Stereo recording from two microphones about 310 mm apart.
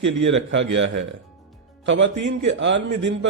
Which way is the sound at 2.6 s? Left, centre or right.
Right.